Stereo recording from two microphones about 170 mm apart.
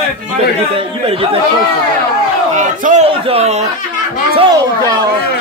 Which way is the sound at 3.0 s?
35° right (ahead or behind).